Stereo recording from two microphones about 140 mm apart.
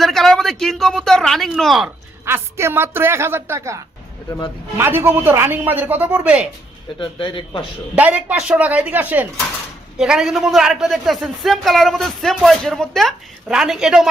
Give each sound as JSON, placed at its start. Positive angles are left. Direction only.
{"t": 0.0, "sound": "speech", "side_deg": 0}
{"t": 2.2, "sound": "speech", "side_deg": -15}
{"t": 4.3, "sound": "speech", "side_deg": 30}
{"t": 4.8, "sound": "speech", "side_deg": -15}
{"t": 7.0, "sound": "speech", "side_deg": 40}
{"t": 7.9, "sound": "speech", "side_deg": -10}